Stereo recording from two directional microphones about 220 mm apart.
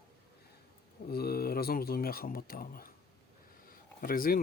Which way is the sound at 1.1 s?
45° left (ahead or behind).